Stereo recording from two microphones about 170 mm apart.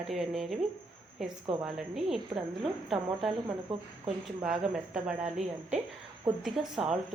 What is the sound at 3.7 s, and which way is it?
Speech, 35° right (ahead or behind).